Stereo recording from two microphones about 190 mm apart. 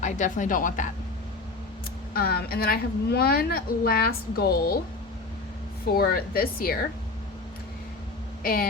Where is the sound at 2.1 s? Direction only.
50° left (ahead or behind).